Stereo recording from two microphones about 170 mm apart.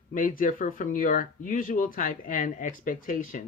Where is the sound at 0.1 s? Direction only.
55° left (ahead or behind).